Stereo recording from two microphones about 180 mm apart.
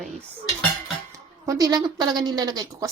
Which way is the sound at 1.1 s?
20° right (ahead or behind).